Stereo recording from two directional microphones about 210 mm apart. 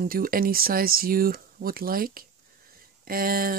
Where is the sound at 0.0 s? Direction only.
45° right (ahead or behind).